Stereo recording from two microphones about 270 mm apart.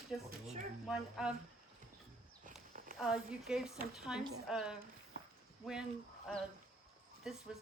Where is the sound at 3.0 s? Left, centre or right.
Centre.